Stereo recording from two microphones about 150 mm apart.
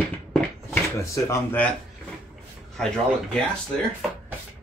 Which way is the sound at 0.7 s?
15° left (ahead or behind).